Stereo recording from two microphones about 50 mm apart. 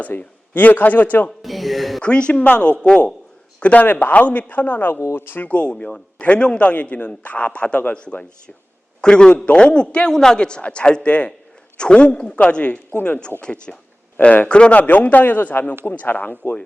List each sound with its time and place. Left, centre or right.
0.0 s a man's voice: left
1.4 s a sound: centre
2.0 s a man's voice: left
3.6 s a man's voice: left
5.1 s speech: left
5.5 s a man's voice: left
12.9 s speech: left
13.4 s a man's voice: centre; by 16.6 s left